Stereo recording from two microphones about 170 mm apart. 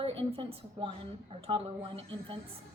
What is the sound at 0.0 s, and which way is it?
A woman's voice, 35° right (ahead or behind).